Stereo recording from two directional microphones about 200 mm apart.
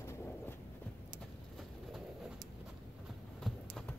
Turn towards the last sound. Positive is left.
turn(degrees=0)  # may be behind; listen again after turning